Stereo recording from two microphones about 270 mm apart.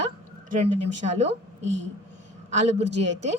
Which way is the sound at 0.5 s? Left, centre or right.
Right.